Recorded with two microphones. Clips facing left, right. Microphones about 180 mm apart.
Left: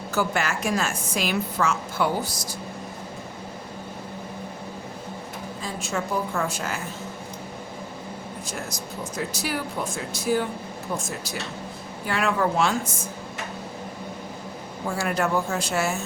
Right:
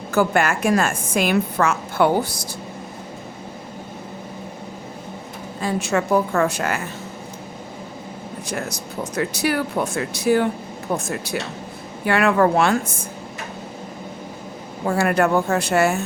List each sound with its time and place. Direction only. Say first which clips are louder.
0.1 s a woman's voice: right 7 dB; 55° right (ahead or behind)
5.5 s speech: right 9 dB; 70° right (ahead or behind)
8.4 s a woman's voice: right 8 dB; 65° right (ahead or behind)
14.8 s a woman's voice: right 7 dB; 60° right (ahead or behind)